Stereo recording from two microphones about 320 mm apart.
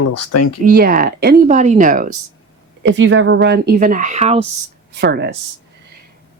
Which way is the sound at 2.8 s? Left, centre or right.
Right.